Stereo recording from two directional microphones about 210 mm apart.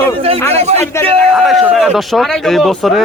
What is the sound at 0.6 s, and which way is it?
Speech, 30° right (ahead or behind).